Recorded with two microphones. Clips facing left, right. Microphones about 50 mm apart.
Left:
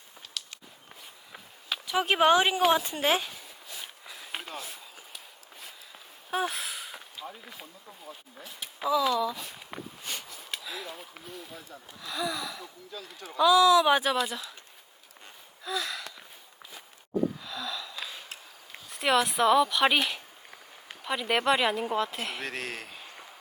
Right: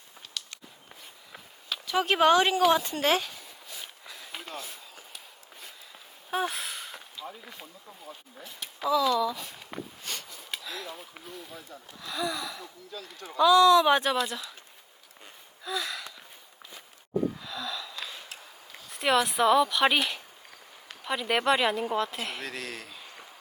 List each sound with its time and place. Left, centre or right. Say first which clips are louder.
0.4 s walk: even; centre
1.9 s speech: right 1 dB; centre
4.4 s a sound: even; centre
6.3 s a sound: even; centre
7.3 s speech: right 1 dB; centre
15.6 s gasp: even; centre
17.4 s wheeze: even; centre
18.9 s speech: even; centre
22.4 s speech: left 2 dB; left